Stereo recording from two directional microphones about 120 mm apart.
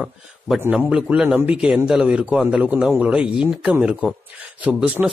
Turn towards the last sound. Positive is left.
turn(degrees=-10)  # may be behind; listen again after turning